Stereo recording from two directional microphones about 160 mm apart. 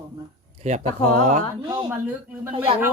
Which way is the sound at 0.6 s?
50° right (ahead or behind).